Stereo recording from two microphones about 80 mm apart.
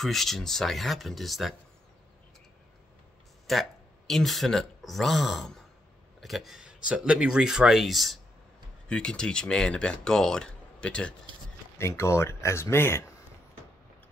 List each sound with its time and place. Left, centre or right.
0.0 s speech: centre
3.5 s speech: centre
8.8 s speech: centre
11.8 s speech: left